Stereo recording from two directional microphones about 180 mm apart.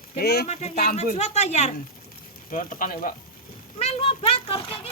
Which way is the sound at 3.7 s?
35° left (ahead or behind).